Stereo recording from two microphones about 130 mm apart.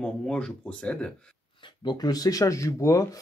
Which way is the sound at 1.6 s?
35° left (ahead or behind).